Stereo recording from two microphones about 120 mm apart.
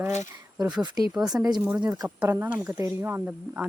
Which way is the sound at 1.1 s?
5° right (ahead or behind).